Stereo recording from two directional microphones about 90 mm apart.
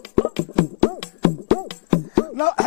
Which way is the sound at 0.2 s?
15° left (ahead or behind).